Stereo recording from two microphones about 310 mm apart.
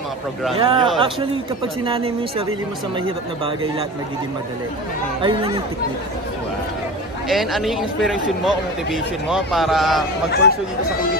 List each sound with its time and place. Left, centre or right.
0.6 s speech: centre
5.2 s speech: centre
7.2 s speech: centre